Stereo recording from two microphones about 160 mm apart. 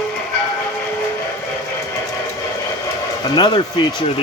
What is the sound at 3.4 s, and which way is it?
Speech, 30° left (ahead or behind).